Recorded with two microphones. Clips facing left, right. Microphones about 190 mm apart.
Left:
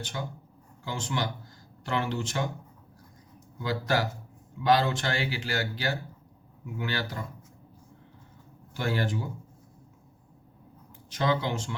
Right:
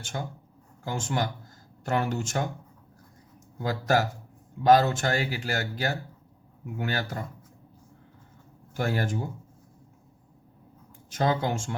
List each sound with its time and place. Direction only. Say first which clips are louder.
0.0 s a man's voice: right 1 dB; 45° right (ahead or behind)
3.6 s a man's voice: right 3 dB; 45° right (ahead or behind)
8.7 s a man's voice: right 1 dB; 45° right (ahead or behind)
11.1 s a man's voice: right 2 dB; 45° right (ahead or behind)